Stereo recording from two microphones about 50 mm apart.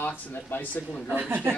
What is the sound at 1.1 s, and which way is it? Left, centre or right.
Speech, right.